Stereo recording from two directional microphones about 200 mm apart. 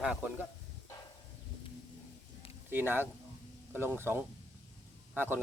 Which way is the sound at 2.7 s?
10° right (ahead or behind).